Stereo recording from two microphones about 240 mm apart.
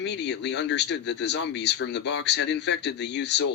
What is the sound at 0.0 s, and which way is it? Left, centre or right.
Speech, left.